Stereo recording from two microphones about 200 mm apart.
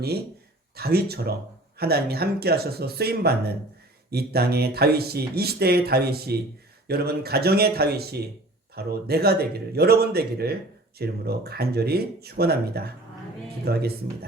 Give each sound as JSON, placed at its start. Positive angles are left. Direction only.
{"t": 0.8, "sound": "speech", "side_deg": -50}